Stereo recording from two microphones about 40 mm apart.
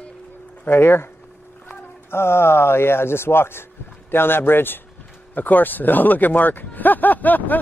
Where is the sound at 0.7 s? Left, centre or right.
Left.